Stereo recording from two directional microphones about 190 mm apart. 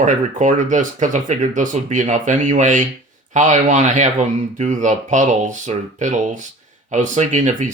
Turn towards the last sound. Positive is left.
turn(degrees=-40)  # may be behind; listen again after turning